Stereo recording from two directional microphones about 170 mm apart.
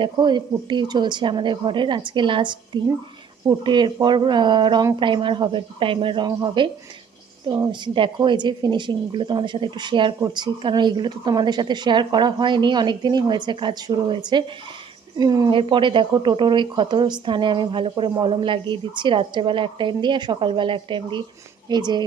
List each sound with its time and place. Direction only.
0.0 s a woman's voice: 25° right (ahead or behind)